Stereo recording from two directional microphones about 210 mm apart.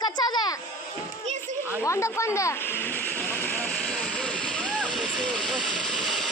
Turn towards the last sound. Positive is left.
turn(degrees=0)  # may be behind; listen again after turning